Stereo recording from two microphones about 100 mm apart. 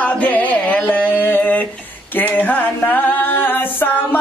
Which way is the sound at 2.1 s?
20° left (ahead or behind).